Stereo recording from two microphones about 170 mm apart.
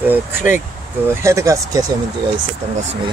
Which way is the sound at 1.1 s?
15° right (ahead or behind).